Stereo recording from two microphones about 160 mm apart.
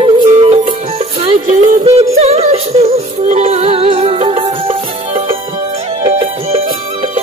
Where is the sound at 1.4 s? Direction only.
40° right (ahead or behind).